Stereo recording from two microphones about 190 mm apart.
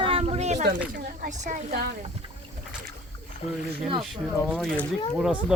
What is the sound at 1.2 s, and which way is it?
Speech, 45° right (ahead or behind).